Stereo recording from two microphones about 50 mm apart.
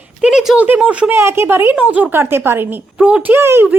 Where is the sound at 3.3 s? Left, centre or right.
Right.